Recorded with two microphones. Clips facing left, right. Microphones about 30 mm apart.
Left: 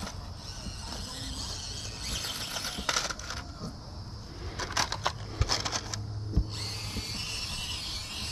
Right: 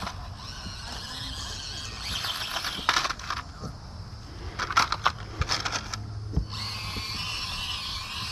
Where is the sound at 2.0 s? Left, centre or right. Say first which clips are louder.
Right 5 dB; right.